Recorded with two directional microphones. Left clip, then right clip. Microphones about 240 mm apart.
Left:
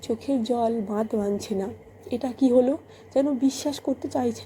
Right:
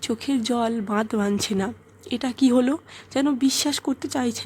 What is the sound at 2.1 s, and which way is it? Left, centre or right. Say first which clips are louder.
A woman's voice: even; right.